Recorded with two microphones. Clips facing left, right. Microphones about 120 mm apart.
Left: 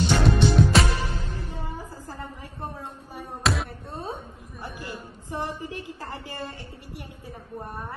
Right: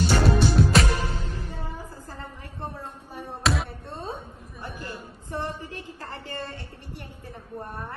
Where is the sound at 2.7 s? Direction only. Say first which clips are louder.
Even; centre (ahead or behind).